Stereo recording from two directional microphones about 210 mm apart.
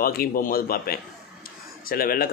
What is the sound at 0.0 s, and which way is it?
A man's voice, 45° left (ahead or behind).